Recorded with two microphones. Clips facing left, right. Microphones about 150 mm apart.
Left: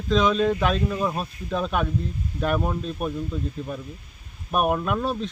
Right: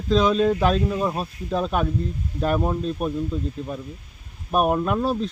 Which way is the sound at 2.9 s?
Centre (ahead or behind).